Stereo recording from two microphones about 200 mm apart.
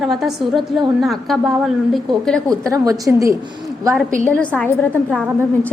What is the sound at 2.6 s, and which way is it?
Speech, 15° right (ahead or behind).